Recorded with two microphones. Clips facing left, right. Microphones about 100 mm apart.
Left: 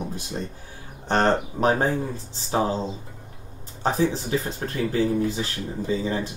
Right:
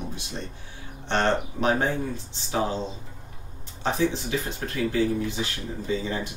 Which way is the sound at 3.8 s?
40° left (ahead or behind).